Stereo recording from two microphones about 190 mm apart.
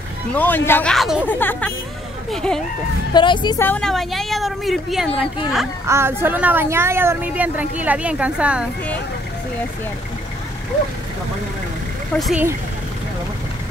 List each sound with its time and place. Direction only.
0.3 s a woman's voice: 10° left (ahead or behind)
1.2 s a woman's voice: 10° left (ahead or behind)
3.1 s speech: 25° left (ahead or behind)
3.5 s a woman's voice: 10° left (ahead or behind)
5.9 s a woman's voice: 15° right (ahead or behind)
12.1 s a woman's voice: centre (ahead or behind)